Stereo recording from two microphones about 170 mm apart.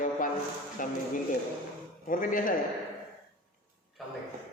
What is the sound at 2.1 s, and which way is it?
Speech, 50° left (ahead or behind).